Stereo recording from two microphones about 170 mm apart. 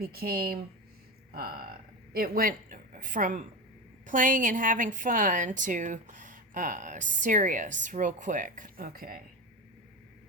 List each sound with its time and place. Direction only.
0.0 s a woman's voice: 65° right (ahead or behind)